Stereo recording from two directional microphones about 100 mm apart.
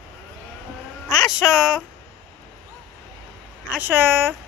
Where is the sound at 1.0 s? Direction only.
Centre (ahead or behind).